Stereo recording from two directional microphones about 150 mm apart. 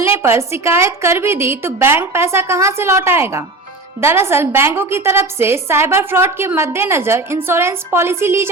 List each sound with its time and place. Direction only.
0.0 s a woman's voice: 15° right (ahead or behind)